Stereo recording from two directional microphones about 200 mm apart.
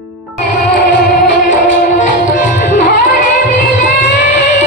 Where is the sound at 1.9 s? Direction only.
40° left (ahead or behind).